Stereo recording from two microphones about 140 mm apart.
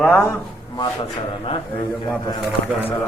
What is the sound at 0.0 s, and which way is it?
Speech, 15° left (ahead or behind).